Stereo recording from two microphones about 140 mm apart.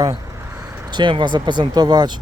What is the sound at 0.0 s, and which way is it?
Speech, 25° right (ahead or behind).